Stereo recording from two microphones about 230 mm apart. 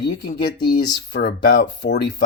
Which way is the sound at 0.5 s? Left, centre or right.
Centre.